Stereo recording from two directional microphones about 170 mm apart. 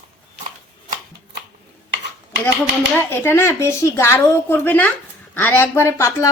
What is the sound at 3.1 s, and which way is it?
Speech, 15° left (ahead or behind).